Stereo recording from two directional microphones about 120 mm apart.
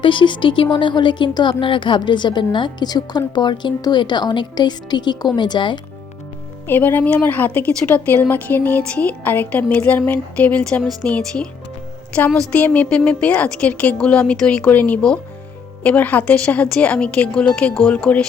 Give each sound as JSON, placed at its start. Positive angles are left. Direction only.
{"t": 0.0, "sound": "speech", "side_deg": 45}
{"t": 6.7, "sound": "a woman's voice", "side_deg": 15}